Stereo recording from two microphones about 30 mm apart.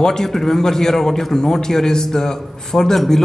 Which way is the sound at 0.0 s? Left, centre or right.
Centre.